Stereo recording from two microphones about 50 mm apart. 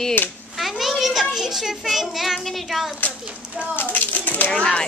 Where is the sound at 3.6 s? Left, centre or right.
Left.